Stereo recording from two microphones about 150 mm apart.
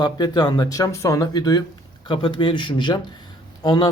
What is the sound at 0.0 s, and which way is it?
Speech, 30° left (ahead or behind).